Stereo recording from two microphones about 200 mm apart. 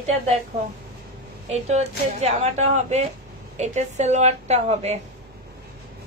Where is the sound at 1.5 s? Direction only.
35° right (ahead or behind).